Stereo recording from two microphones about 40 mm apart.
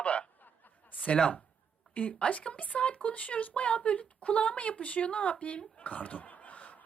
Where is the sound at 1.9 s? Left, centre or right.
Left.